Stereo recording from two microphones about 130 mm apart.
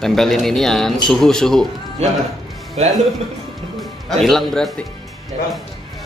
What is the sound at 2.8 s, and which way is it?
Speech, 55° right (ahead or behind).